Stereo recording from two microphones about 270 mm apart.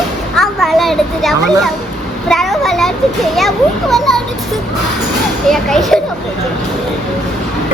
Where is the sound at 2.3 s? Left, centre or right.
Centre.